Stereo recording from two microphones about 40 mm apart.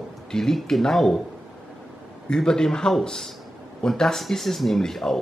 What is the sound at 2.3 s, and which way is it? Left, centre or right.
Speech, centre.